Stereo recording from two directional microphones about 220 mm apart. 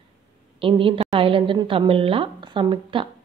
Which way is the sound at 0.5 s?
25° right (ahead or behind).